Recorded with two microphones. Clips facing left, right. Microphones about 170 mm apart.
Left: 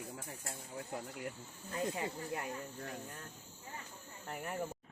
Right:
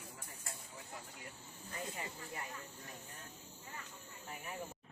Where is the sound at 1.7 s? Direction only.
85° left.